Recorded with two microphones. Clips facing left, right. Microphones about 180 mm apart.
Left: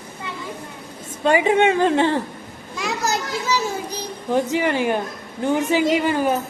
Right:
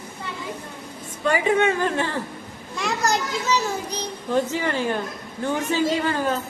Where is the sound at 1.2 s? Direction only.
20° left (ahead or behind).